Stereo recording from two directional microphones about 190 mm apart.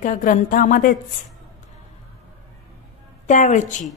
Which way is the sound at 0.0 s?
45° left (ahead or behind).